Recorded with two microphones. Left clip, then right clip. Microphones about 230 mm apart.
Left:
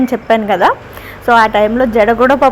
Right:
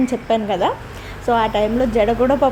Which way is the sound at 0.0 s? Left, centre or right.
Centre.